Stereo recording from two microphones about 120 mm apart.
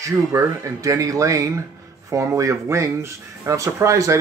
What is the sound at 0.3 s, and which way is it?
Speech, 25° right (ahead or behind).